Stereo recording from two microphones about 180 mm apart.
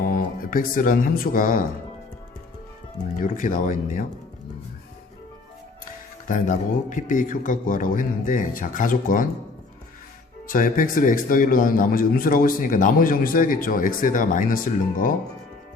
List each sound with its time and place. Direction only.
0.0 s speech: 55° left (ahead or behind)
3.2 s speech: 50° left (ahead or behind)
5.8 s speech: 45° left (ahead or behind)
10.4 s speech: 50° left (ahead or behind)